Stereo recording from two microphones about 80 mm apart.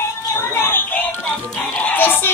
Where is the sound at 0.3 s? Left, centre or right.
Left.